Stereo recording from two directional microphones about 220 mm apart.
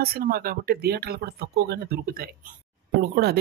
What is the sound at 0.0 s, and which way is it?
Speech, 45° right (ahead or behind).